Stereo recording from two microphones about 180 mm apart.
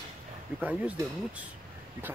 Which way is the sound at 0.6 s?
10° right (ahead or behind).